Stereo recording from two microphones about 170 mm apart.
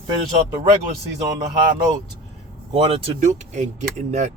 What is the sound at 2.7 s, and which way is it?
Speech, 35° right (ahead or behind).